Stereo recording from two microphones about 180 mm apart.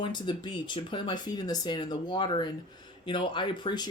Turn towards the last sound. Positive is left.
turn(degrees=25)  # may be behind; listen again after turning